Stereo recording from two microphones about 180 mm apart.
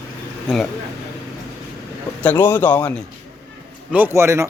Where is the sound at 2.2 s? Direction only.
10° left (ahead or behind).